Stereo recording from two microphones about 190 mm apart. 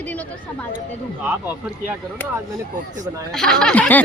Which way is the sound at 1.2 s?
10° right (ahead or behind).